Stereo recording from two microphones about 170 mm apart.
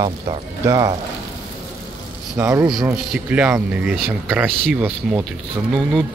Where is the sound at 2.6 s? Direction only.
Centre (ahead or behind).